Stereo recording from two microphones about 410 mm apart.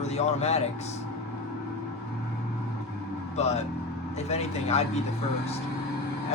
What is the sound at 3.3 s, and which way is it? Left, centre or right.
Speech, centre.